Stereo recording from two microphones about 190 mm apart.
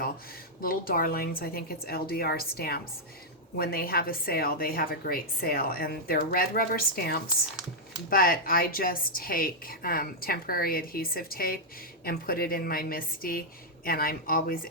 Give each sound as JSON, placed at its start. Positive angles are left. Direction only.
{"t": 0.6, "sound": "a woman's voice", "side_deg": 50}